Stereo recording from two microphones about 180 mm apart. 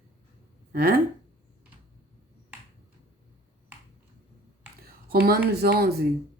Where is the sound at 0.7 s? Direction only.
55° right (ahead or behind).